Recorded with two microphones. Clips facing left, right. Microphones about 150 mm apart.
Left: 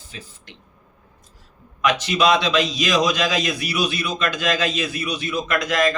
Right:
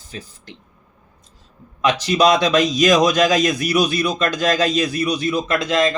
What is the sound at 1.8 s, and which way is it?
A man's voice, 35° right (ahead or behind).